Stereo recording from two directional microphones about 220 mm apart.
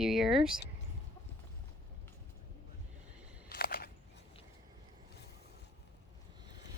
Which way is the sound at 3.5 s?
45° left (ahead or behind).